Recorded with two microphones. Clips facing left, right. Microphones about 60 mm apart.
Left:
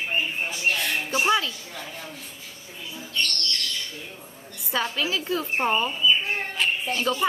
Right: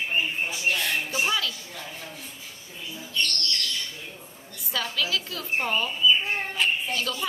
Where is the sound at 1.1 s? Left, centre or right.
Left.